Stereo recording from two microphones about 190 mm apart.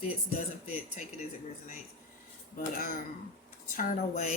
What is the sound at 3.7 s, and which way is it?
Speech, 45° left (ahead or behind).